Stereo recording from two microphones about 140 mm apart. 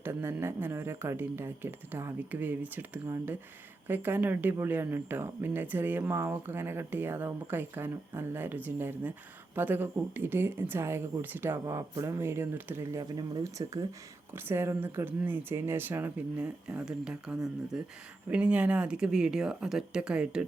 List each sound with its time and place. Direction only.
0.0 s speech: 20° right (ahead or behind)